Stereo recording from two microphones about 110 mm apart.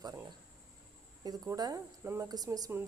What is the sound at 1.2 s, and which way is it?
Speech, 35° right (ahead or behind).